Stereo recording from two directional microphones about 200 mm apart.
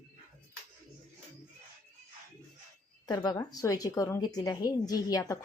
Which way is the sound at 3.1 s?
20° left (ahead or behind).